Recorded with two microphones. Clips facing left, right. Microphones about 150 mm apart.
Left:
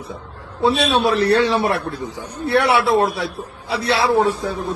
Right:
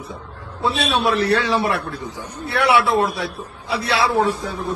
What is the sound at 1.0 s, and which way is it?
A man's voice, 30° left (ahead or behind).